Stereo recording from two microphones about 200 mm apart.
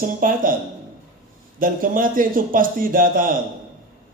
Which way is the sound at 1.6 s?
45° right (ahead or behind).